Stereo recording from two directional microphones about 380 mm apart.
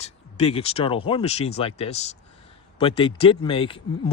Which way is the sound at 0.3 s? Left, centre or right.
Centre.